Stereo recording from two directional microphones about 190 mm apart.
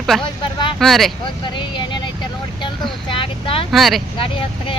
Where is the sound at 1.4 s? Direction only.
25° left (ahead or behind).